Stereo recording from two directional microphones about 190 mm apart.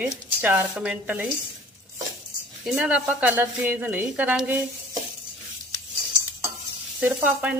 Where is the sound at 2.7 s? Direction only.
5° right (ahead or behind).